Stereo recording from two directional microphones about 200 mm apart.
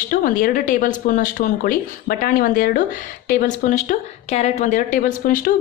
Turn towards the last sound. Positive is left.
turn(degrees=40)  # may be behind; listen again after turning